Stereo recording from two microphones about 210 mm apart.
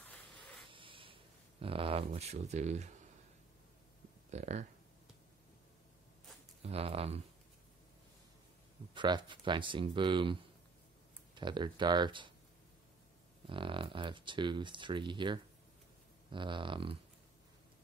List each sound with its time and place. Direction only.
0.3 s a sound: 25° right (ahead or behind)
4.3 s speech: 30° right (ahead or behind)
6.6 s speech: 30° right (ahead or behind)
8.9 s speech: 20° right (ahead or behind)
11.3 s speech: 20° right (ahead or behind)
13.5 s speech: 25° right (ahead or behind)